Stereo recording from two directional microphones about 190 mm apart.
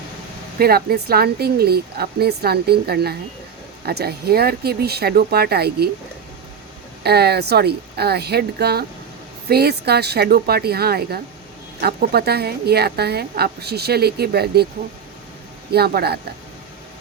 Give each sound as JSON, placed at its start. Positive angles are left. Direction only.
{"t": 0.6, "sound": "a woman's voice", "side_deg": -55}
{"t": 7.0, "sound": "a woman's voice", "side_deg": -60}
{"t": 15.7, "sound": "a woman's voice", "side_deg": -55}